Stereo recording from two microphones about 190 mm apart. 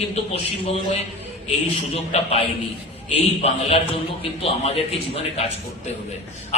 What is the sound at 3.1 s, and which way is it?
A man's voice, 35° left (ahead or behind).